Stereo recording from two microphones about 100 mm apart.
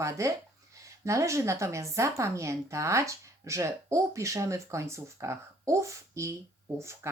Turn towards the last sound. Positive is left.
turn(degrees=-30)  # may be behind; listen again after turning